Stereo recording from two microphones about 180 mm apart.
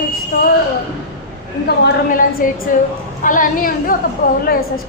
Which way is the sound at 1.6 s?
65° left (ahead or behind).